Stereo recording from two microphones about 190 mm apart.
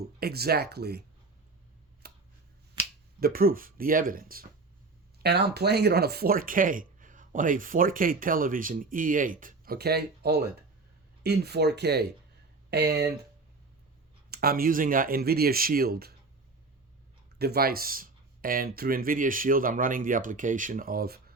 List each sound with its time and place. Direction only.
0.0 s speech: 55° right (ahead or behind)
2.0 s a sound: 60° right (ahead or behind)
3.2 s speech: 50° right (ahead or behind)
14.3 s speech: 55° right (ahead or behind)
17.3 s speech: 55° right (ahead or behind)